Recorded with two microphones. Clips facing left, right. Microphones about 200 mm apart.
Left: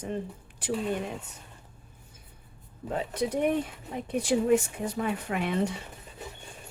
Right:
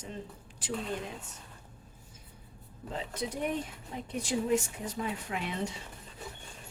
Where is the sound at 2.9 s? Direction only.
65° left (ahead or behind).